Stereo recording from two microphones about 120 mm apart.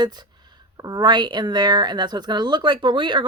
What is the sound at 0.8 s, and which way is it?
Speech, 30° right (ahead or behind).